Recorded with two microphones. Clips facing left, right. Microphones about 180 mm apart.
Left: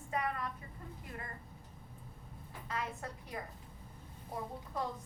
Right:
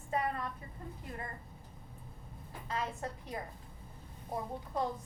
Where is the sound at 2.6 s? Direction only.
30° right (ahead or behind).